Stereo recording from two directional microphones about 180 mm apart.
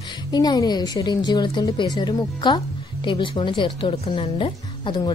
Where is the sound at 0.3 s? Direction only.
20° left (ahead or behind).